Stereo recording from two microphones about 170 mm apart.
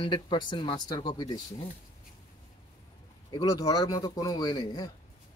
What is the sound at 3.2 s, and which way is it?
Speech, 20° left (ahead or behind).